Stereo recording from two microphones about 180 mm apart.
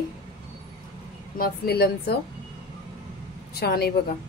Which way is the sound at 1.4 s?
60° left (ahead or behind).